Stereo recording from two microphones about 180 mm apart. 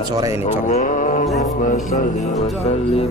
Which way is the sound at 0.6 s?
45° left (ahead or behind).